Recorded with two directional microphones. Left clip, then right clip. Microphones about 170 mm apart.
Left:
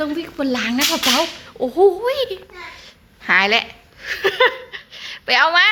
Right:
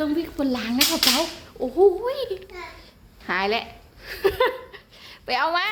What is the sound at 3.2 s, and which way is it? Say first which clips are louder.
Speech: left 9 dB; 5° left (ahead or behind).